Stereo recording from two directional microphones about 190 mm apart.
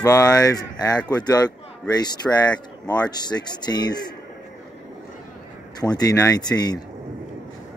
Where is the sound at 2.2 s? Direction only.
5° left (ahead or behind).